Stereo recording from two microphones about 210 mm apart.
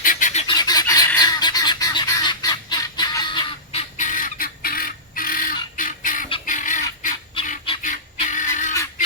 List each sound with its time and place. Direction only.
0.0 s fowl: 40° left (ahead or behind)
0.4 s goose: 20° left (ahead or behind)
3.9 s bird: 40° left (ahead or behind)
6.4 s chicken: 40° left (ahead or behind)
7.8 s goose: 35° left (ahead or behind)